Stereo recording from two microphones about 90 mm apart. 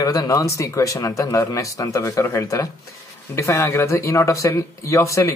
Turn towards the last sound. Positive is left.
turn(degrees=35)  # may be behind; listen again after turning